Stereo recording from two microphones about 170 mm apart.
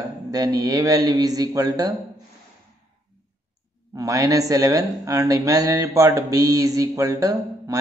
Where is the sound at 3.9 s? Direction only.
20° right (ahead or behind).